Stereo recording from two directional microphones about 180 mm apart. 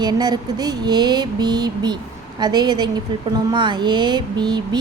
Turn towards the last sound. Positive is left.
turn(degrees=-25)  # may be behind; listen again after turning